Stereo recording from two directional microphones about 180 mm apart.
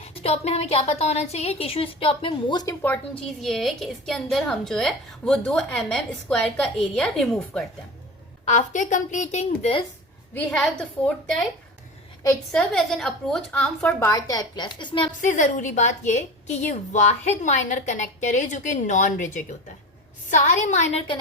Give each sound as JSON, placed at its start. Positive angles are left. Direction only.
{"t": 0.0, "sound": "a woman's voice", "side_deg": 35}
{"t": 2.8, "sound": "a woman's voice", "side_deg": 5}
{"t": 8.4, "sound": "a woman's voice", "side_deg": 40}
{"t": 10.3, "sound": "a woman's voice", "side_deg": 5}
{"t": 12.5, "sound": "a woman's voice", "side_deg": 5}
{"t": 14.1, "sound": "a woman's voice", "side_deg": 20}
{"t": 15.2, "sound": "a woman's voice", "side_deg": 45}